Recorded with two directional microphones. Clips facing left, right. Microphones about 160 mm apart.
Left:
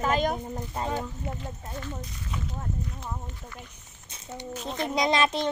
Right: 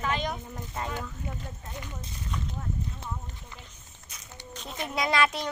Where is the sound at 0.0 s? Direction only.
45° left (ahead or behind).